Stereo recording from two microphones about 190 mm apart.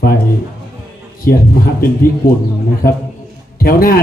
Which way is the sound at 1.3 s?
50° left (ahead or behind).